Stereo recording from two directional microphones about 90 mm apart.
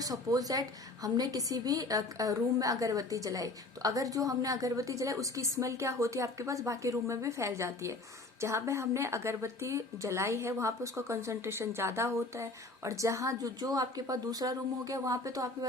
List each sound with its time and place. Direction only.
0.0 s a woman's voice: 45° right (ahead or behind)